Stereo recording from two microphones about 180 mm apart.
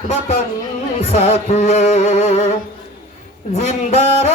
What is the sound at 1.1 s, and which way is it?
Music, 40° left (ahead or behind).